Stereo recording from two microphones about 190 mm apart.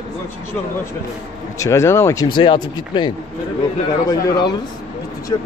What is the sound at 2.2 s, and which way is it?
Speech, 25° left (ahead or behind).